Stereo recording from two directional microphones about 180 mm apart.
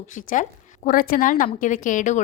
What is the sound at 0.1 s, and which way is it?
A woman's voice, 45° left (ahead or behind).